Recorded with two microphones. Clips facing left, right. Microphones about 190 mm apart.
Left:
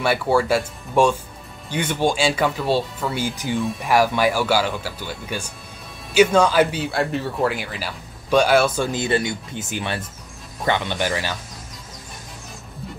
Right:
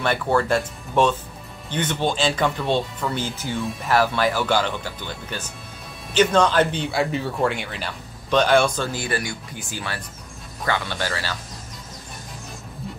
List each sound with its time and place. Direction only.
0.0 s speech: 10° left (ahead or behind)
8.9 s speech: 25° left (ahead or behind)